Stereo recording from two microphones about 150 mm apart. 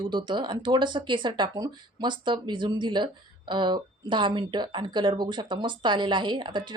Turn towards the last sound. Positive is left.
turn(degrees=-30)  # may be behind; listen again after turning